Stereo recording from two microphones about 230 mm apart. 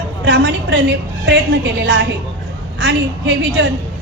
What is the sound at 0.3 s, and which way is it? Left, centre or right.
A woman's voice, right.